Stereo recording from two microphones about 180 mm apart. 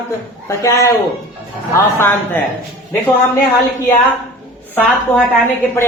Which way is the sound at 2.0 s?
10° left (ahead or behind).